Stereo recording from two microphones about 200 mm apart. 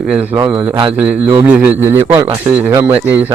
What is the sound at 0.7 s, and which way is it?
Mantra, 25° right (ahead or behind).